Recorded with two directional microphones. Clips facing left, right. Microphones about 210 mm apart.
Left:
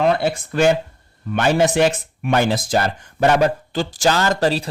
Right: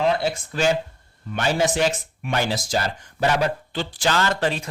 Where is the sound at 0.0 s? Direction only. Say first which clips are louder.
Left 4 dB; 60° left (ahead or behind).